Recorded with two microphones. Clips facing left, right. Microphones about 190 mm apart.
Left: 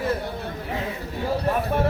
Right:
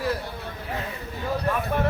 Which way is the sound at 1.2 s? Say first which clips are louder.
Left 2 dB; 30° left (ahead or behind).